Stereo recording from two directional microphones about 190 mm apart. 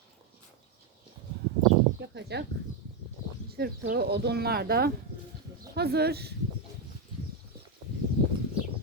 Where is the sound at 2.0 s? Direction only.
60° right (ahead or behind).